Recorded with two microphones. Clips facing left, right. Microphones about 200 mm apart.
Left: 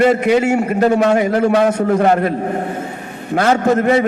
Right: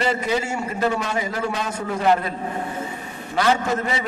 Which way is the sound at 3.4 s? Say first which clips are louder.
Left 7 dB; 50° left (ahead or behind).